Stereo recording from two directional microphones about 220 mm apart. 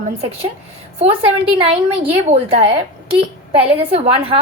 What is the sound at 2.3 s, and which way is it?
A woman's voice, 25° right (ahead or behind).